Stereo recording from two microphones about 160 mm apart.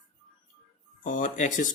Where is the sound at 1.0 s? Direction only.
55° left (ahead or behind).